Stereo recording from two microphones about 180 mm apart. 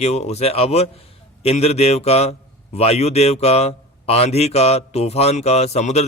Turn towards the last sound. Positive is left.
turn(degrees=35)  # may be behind; listen again after turning